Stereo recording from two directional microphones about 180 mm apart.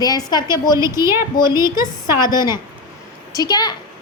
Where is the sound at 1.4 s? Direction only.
25° left (ahead or behind).